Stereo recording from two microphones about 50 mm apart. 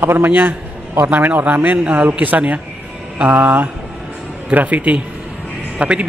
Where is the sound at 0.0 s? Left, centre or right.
Right.